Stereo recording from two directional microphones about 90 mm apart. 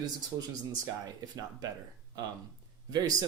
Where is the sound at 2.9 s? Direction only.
45° right (ahead or behind).